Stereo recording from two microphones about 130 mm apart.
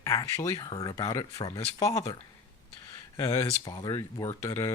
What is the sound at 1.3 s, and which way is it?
Speech, 50° left (ahead or behind).